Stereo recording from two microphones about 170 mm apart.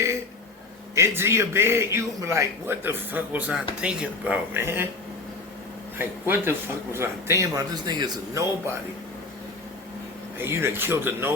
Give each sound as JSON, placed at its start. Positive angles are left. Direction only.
{"t": 0.9, "sound": "a man's voice", "side_deg": -15}
{"t": 6.0, "sound": "a man's voice", "side_deg": -15}
{"t": 10.3, "sound": "a man's voice", "side_deg": -15}